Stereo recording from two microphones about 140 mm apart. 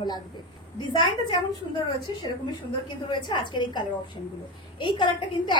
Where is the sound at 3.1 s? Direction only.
35° left (ahead or behind).